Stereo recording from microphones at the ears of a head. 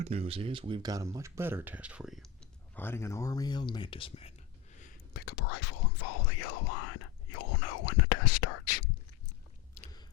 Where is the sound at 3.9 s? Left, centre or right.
Left.